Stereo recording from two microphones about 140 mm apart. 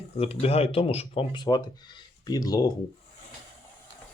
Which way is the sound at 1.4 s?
30° left (ahead or behind).